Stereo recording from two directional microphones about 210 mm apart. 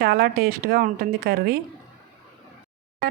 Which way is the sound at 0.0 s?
45° right (ahead or behind).